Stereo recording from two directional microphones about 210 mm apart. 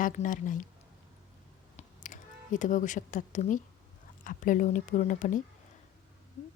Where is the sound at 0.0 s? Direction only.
40° left (ahead or behind).